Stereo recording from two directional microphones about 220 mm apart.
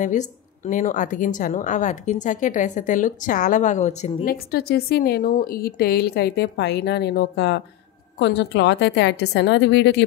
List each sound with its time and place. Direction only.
0.0 s a woman's voice: 35° left (ahead or behind); by 10.0 s 50° left (ahead or behind)